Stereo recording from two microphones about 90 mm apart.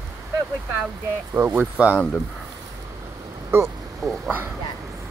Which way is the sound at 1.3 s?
25° right (ahead or behind).